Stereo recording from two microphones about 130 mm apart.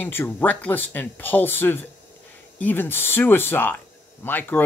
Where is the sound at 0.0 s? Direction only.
15° left (ahead or behind).